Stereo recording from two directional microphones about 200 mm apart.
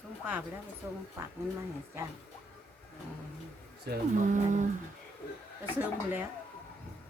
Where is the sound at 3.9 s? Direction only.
55° right (ahead or behind).